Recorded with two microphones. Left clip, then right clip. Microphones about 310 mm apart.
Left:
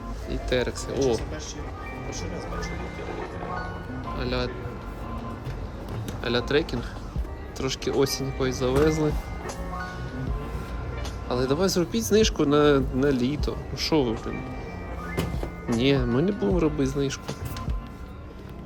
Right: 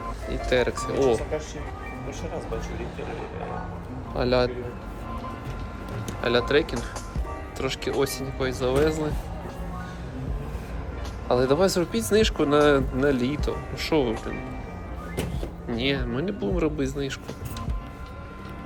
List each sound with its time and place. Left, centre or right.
0.3 s speech: centre
4.2 s speech: centre
6.2 s speech: centre
11.3 s speech: centre
15.8 s speech: centre